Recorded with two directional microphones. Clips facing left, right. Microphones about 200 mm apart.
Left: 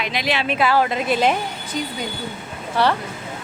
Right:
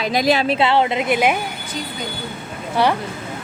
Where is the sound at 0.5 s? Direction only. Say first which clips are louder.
Right 2 dB; 25° right (ahead or behind).